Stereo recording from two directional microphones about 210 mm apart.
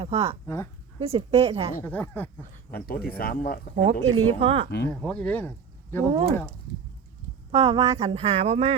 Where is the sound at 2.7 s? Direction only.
45° left (ahead or behind).